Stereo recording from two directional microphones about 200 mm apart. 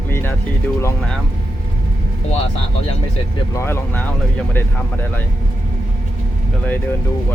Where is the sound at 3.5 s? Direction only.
10° left (ahead or behind).